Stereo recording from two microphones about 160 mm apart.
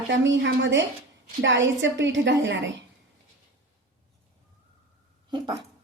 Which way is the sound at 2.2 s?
90° right.